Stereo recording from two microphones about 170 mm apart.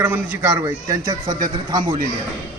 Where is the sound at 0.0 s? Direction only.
10° right (ahead or behind).